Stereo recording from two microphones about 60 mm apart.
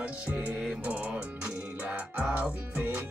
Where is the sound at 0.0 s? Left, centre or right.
Right.